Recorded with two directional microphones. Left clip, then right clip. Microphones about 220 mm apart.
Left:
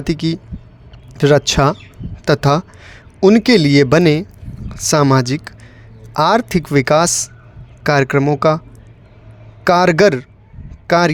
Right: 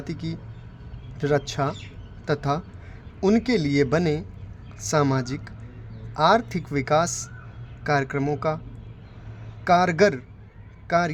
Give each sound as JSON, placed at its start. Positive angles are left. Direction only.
{"t": 0.0, "sound": "speech", "side_deg": 45}
{"t": 9.6, "sound": "speech", "side_deg": 45}